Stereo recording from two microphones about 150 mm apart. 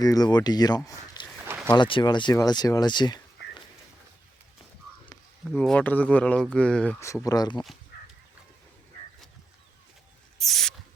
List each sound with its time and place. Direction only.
0.0 s speech: 25° left (ahead or behind)
0.9 s a sound: 25° left (ahead or behind)
1.7 s speech: 30° left (ahead or behind)
5.5 s speech: 5° left (ahead or behind)
7.0 s speech: 20° left (ahead or behind)
10.3 s a sound: centre (ahead or behind)